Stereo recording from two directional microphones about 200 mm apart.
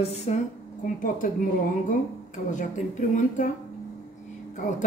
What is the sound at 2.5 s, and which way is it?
Speech, 40° left (ahead or behind).